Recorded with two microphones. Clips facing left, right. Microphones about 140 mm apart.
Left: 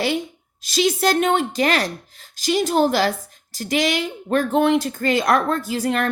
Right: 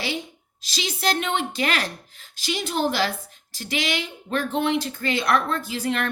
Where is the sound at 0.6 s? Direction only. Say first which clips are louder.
Left 8 dB; 45° left (ahead or behind).